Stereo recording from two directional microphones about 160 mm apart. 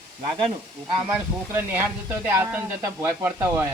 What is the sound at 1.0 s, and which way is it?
Speech, 10° right (ahead or behind).